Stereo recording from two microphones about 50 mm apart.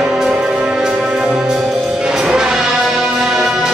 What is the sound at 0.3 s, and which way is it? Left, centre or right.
Music, right.